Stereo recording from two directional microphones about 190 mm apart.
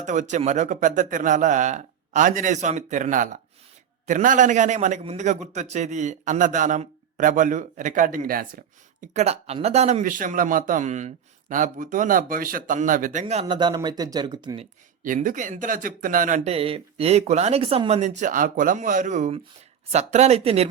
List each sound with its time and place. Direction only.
0.0 s a man's voice: 40° right (ahead or behind)
13.4 s speech: 25° right (ahead or behind)
15.0 s a man's voice: 45° right (ahead or behind)